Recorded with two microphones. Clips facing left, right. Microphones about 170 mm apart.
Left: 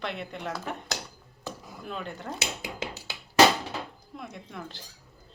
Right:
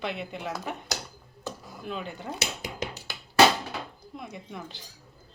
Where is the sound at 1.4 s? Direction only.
Centre (ahead or behind).